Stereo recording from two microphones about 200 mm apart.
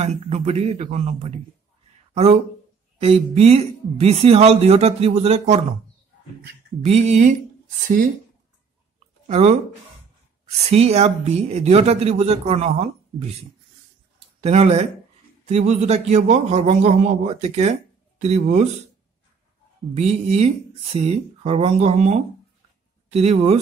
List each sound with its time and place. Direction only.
0.0 s speech: 35° right (ahead or behind)
3.0 s speech: 30° right (ahead or behind)
6.8 s speech: 35° right (ahead or behind)
9.3 s speech: 35° right (ahead or behind)
10.7 s speech: 30° right (ahead or behind)
14.4 s speech: 30° right (ahead or behind)
19.9 s speech: 30° right (ahead or behind)